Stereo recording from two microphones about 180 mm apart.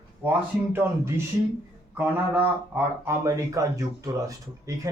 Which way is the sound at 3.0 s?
15° right (ahead or behind).